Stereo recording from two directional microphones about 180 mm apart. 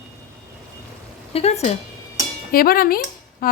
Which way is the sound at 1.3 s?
35° left (ahead or behind).